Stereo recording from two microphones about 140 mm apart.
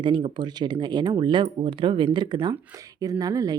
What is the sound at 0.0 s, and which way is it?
Speech, 35° right (ahead or behind).